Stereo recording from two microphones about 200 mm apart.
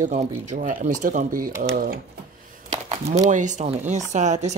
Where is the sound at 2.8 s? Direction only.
35° right (ahead or behind).